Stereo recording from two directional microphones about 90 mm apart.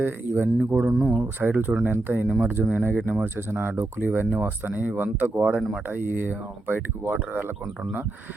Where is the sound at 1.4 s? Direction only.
20° right (ahead or behind).